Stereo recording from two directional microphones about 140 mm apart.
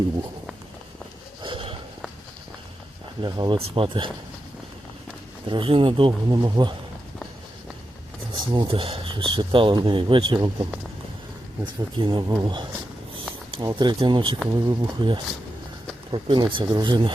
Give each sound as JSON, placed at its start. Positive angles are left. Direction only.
{"t": 1.4, "sound": "a sound", "side_deg": -35}
{"t": 3.2, "sound": "speech", "side_deg": -30}
{"t": 5.5, "sound": "speech", "side_deg": -40}
{"t": 8.3, "sound": "speech", "side_deg": -30}
{"t": 11.6, "sound": "speech", "side_deg": -35}
{"t": 13.7, "sound": "speech", "side_deg": -35}